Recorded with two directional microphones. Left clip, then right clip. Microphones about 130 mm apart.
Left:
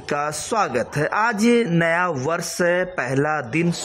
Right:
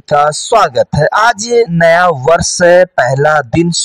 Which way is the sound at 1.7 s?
40° right (ahead or behind).